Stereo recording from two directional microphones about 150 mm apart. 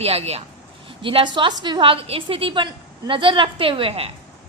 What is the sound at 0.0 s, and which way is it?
A woman's voice, 45° right (ahead or behind).